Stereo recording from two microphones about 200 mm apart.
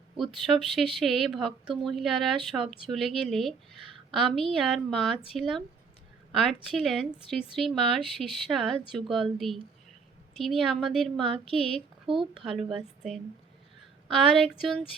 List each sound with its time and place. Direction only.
0.2 s speech: centre (ahead or behind)
12.0 s speech: 25° right (ahead or behind)
12.5 s a woman's voice: centre (ahead or behind)